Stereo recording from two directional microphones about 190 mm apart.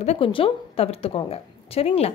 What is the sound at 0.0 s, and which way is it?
A woman's voice, 30° left (ahead or behind).